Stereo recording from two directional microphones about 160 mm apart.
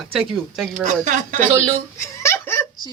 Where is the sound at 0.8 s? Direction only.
50° right (ahead or behind).